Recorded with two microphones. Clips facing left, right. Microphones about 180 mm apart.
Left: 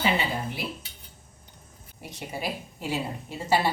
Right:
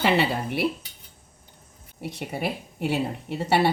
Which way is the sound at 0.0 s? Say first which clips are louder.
Right 4 dB; 70° right (ahead or behind).